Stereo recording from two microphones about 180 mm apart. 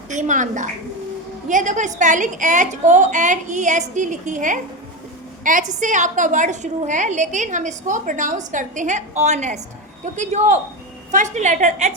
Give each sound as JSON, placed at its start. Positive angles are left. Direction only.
{"t": 0.1, "sound": "a woman's voice", "side_deg": -45}
{"t": 5.4, "sound": "a sound", "side_deg": -45}
{"t": 5.8, "sound": "a woman's voice", "side_deg": -45}